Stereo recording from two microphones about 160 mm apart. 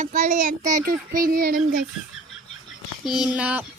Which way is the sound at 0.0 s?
50° right (ahead or behind).